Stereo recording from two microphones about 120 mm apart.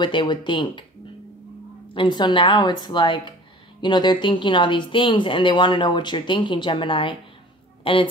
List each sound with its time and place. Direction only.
0.0 s a woman's voice: 40° left (ahead or behind)
2.0 s a woman's voice: 40° left (ahead or behind)